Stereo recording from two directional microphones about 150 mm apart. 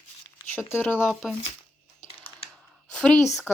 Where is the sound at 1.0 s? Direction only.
5° right (ahead or behind).